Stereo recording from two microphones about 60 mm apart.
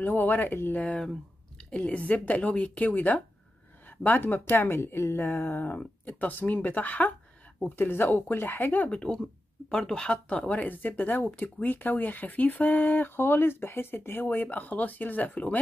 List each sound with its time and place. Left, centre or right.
0.0 s speech: left
1.7 s a woman's voice: left
8.9 s speech: centre